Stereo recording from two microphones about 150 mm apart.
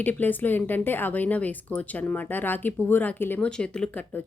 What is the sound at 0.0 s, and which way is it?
Speech, 10° left (ahead or behind).